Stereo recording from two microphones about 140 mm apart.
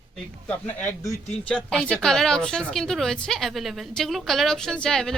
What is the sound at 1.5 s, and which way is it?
A woman's voice, 5° left (ahead or behind).